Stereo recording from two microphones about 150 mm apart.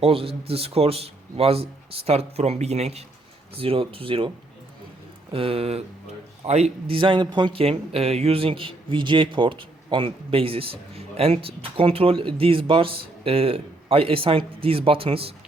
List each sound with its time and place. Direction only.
0.0 s speech: 40° right (ahead or behind)
5.3 s speech: 40° right (ahead or behind)